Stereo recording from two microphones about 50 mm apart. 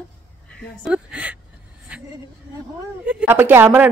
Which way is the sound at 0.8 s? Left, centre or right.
Right.